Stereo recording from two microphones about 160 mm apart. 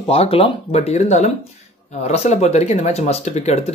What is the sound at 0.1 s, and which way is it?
Speech, 35° left (ahead or behind).